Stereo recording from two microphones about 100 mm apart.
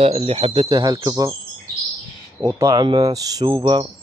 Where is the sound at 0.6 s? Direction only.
35° right (ahead or behind).